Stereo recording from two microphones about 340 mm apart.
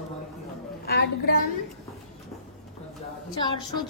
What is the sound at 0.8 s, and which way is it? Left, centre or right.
Speech, left.